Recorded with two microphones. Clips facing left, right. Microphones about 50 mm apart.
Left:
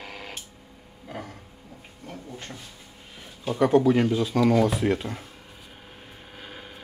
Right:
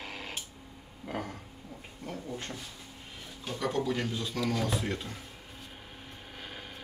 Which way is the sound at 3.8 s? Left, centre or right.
Left.